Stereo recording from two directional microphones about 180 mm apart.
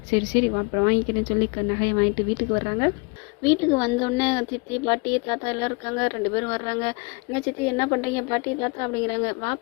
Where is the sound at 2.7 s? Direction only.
25° left (ahead or behind).